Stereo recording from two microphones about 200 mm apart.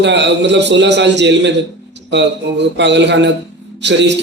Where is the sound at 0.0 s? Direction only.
60° right (ahead or behind).